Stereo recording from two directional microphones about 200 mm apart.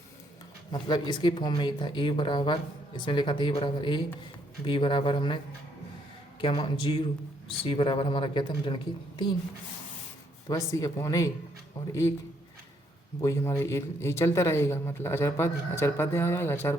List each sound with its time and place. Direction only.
0.7 s speech: 20° left (ahead or behind)
6.4 s speech: 25° left (ahead or behind)
10.5 s speech: 15° left (ahead or behind)
13.2 s speech: 15° left (ahead or behind)